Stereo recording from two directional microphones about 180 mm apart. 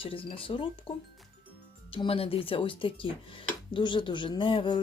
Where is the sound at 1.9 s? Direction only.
30° left (ahead or behind).